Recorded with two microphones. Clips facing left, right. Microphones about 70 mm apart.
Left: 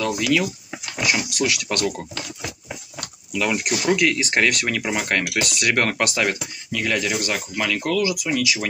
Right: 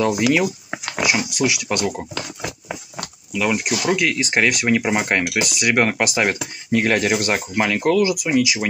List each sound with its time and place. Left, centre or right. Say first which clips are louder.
0.1 s speech: right 3 dB; right
0.7 s pig: right 5 dB; right
1.4 s speech: right 2 dB; centre
3.3 s speech: right 2 dB; centre
5.4 s speech: right 3 dB; centre
6.2 s speech: right 2 dB; right